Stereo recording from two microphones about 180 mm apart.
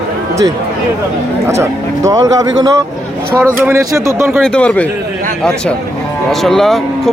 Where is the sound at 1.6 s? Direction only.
20° right (ahead or behind).